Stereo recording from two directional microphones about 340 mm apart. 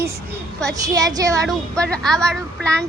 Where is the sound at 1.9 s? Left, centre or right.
Centre.